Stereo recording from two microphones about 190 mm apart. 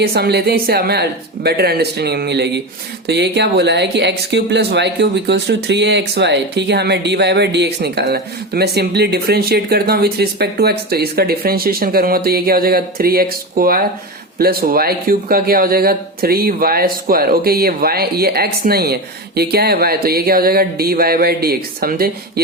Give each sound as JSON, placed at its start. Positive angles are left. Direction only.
{"t": 0.0, "sound": "speech", "side_deg": -55}